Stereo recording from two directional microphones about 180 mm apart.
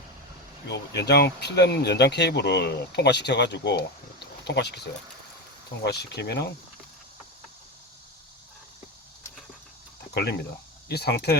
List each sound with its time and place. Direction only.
0.7 s speech: 65° left (ahead or behind)
5.8 s speech: 65° left (ahead or behind)
10.2 s speech: 65° left (ahead or behind)